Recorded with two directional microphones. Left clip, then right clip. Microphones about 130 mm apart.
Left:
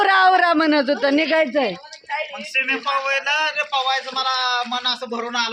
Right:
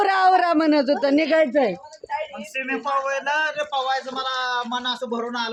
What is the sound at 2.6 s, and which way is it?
A man's voice, 40° right (ahead or behind).